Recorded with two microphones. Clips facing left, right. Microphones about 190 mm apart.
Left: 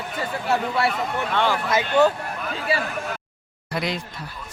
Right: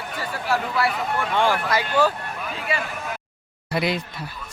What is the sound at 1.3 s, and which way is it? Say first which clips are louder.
Speech: right 1 dB; 10° right (ahead or behind).